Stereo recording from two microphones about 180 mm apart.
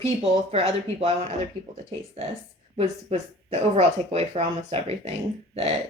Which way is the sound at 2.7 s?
35° right (ahead or behind).